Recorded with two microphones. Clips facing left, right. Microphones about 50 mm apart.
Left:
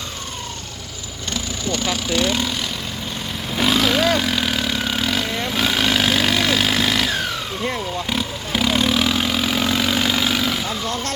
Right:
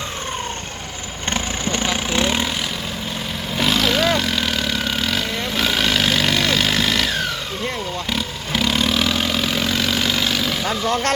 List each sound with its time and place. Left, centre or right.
1.3 s vehicle: right
2.0 s speech: right
3.6 s vehicle: centre